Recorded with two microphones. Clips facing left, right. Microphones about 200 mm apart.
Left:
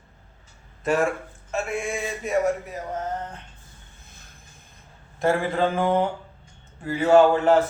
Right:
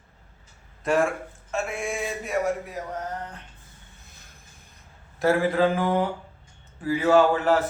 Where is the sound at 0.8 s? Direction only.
Centre (ahead or behind).